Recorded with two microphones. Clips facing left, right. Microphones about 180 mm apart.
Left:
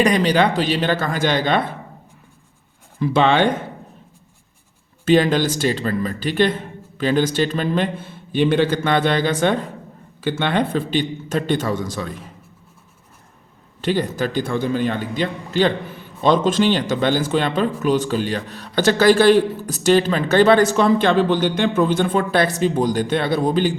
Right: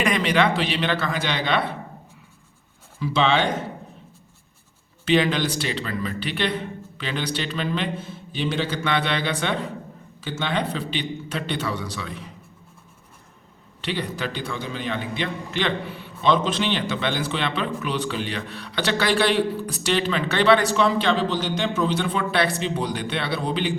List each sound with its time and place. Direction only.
0.0 s speech: 35° left (ahead or behind)
3.0 s a man's voice: 55° left (ahead or behind)
5.0 s a man's voice: 45° left (ahead or behind)
10.2 s a man's voice: 60° left (ahead or behind)
13.8 s a man's voice: 45° left (ahead or behind)